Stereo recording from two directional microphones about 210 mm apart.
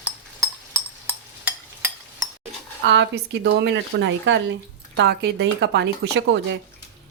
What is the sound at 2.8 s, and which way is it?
Speech, 55° right (ahead or behind).